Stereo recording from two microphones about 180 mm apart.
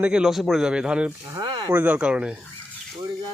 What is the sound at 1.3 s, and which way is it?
Speech, 25° right (ahead or behind).